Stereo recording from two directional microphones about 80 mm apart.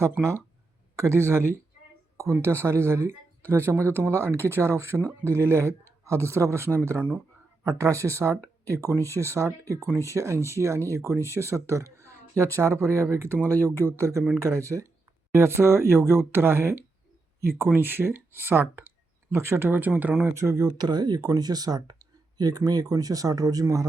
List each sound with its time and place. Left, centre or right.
0.0 s speech: right
14.7 s speech: centre
15.3 s speech: right
20.3 s speech: right
20.7 s speech: right